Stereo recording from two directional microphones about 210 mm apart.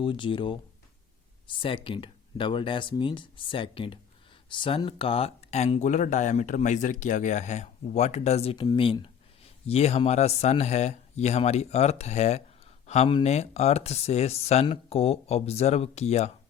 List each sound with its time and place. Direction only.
0.0 s speech: 25° left (ahead or behind)